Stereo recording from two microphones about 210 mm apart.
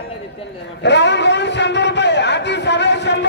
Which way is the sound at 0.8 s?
55° left (ahead or behind).